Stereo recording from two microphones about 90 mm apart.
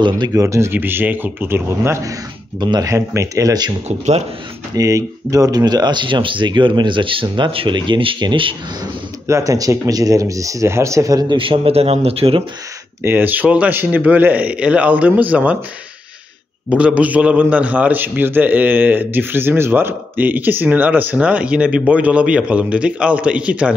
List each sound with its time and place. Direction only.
0.3 s a man's voice: 35° right (ahead or behind)
2.6 s speech: 50° right (ahead or behind)
3.2 s speech: 40° right (ahead or behind)
4.7 s speech: 40° right (ahead or behind); by 8.5 s 65° right (ahead or behind)
9.3 s speech: 35° right (ahead or behind)
11.2 s a man's voice: 75° right (ahead or behind)
13.0 s a man's voice: 20° right (ahead or behind)
16.6 s a man's voice: 15° right (ahead or behind)